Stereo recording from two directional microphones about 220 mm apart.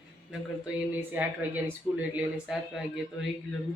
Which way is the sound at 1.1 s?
10° right (ahead or behind).